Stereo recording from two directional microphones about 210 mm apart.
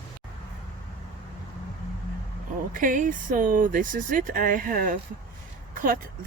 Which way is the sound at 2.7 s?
40° right (ahead or behind).